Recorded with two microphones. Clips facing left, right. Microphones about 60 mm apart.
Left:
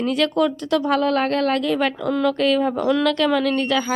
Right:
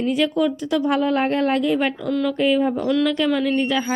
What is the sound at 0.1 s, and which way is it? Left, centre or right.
Speech, centre.